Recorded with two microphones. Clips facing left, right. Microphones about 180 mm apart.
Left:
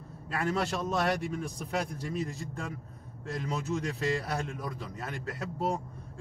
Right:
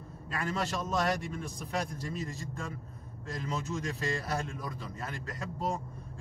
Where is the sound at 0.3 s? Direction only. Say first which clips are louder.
Left 3 dB; 65° left (ahead or behind).